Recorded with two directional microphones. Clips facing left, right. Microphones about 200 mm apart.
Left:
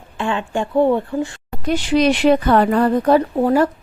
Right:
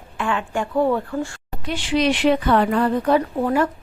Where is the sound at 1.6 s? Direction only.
40° left (ahead or behind).